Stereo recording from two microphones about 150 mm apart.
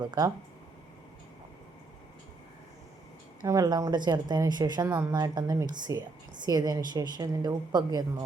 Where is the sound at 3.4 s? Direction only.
25° right (ahead or behind).